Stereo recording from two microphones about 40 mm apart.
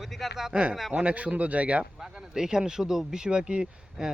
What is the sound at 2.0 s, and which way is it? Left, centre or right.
Speech, centre.